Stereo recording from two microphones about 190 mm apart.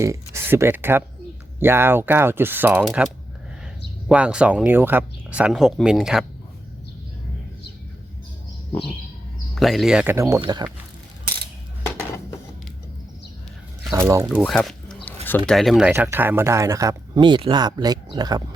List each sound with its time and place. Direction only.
0.0 s speech: 15° right (ahead or behind)
4.1 s speech: 5° right (ahead or behind)
9.6 s speech: centre (ahead or behind); by 10.7 s 20° right (ahead or behind)
13.9 s speech: 15° right (ahead or behind)
14.3 s speech: 5° left (ahead or behind)
15.0 s a sound: 10° left (ahead or behind)
15.4 s speech: centre (ahead or behind); by 18.4 s 20° right (ahead or behind)